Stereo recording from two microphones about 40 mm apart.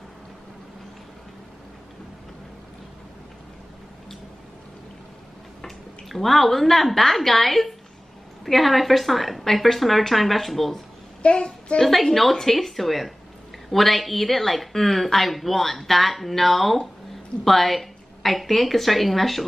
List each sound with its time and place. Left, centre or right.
5.6 s a woman's voice: centre
11.2 s child singing: left
11.8 s a woman's voice: centre